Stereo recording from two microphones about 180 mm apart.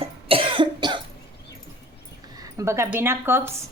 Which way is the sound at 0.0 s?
30° right (ahead or behind).